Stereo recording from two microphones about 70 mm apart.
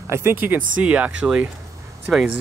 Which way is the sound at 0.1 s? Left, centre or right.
Right.